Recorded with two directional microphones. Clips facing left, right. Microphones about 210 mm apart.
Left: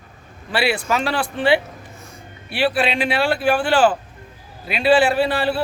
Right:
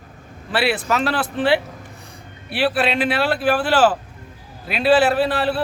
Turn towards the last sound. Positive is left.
turn(degrees=0)  # may be behind; listen again after turning